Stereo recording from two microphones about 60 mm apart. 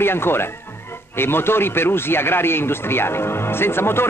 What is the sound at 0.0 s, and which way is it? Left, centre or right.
A man's voice, left.